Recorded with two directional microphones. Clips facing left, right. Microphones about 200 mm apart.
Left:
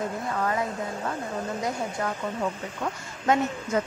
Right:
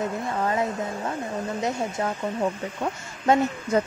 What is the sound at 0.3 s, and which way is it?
Speech, 25° right (ahead or behind).